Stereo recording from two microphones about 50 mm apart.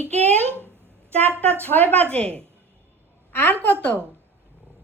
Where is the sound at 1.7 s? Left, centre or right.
Left.